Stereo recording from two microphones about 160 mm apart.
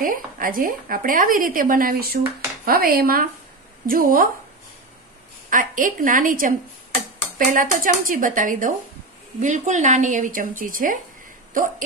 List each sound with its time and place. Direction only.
0.0 s a woman's voice: 60° right (ahead or behind)
5.5 s a woman's voice: 55° right (ahead or behind)